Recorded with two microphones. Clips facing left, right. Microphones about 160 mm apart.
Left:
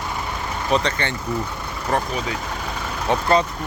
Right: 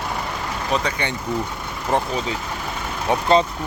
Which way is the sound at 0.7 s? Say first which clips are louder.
Left 2 dB; 10° right (ahead or behind).